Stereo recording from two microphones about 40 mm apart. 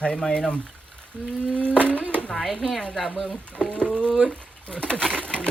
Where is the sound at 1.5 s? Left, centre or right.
Left.